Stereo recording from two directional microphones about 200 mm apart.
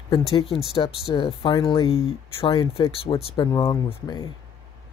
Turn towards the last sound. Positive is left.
turn(degrees=20)  # may be behind; listen again after turning